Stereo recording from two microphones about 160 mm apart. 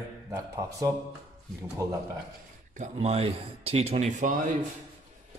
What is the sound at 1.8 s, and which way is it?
Speech, 20° right (ahead or behind).